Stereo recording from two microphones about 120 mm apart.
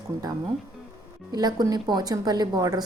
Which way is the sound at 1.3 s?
35° right (ahead or behind).